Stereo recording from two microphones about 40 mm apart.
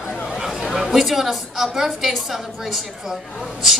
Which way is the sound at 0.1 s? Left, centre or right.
Centre.